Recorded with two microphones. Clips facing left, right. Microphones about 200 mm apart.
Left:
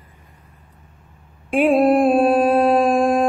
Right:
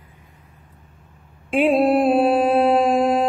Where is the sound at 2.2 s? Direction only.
10° right (ahead or behind).